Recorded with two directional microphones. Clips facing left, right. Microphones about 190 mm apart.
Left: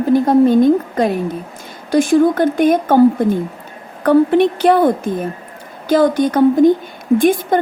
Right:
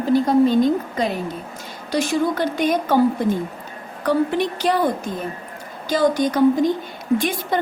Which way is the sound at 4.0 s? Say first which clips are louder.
Left 8 dB; 55° left (ahead or behind).